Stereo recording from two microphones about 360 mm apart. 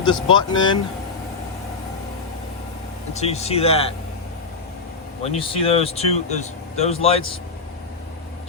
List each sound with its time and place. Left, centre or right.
0.0 s speech: centre
3.1 s speech: centre
5.3 s speech: centre